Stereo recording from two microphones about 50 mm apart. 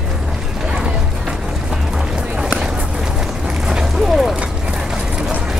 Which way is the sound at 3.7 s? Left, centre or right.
Centre.